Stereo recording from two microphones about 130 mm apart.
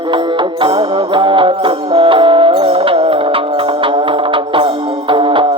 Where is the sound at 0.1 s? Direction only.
40° right (ahead or behind).